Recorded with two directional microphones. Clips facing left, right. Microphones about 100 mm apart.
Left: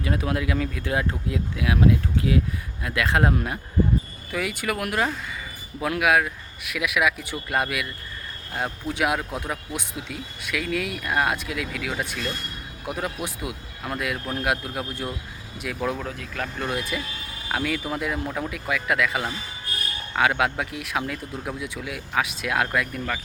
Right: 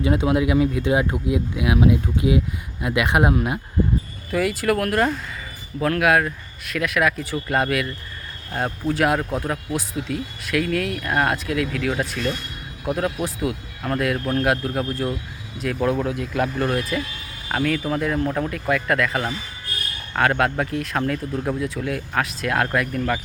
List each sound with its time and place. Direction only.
0.0 s speech: 20° right (ahead or behind)
4.3 s speech: centre (ahead or behind)